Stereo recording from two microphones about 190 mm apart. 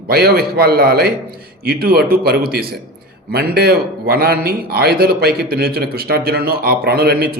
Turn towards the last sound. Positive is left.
turn(degrees=-55)  # may be behind; listen again after turning